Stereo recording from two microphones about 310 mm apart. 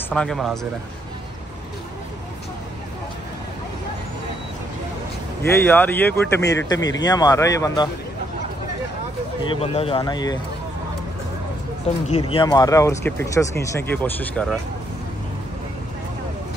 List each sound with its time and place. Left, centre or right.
0.1 s speech: centre
5.4 s speech: centre
9.5 s speech: centre
12.1 s speech: centre